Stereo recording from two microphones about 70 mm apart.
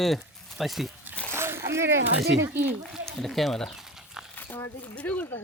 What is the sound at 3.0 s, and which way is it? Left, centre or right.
Speech, centre.